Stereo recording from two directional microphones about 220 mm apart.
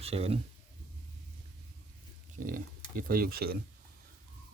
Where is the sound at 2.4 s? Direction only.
40° right (ahead or behind).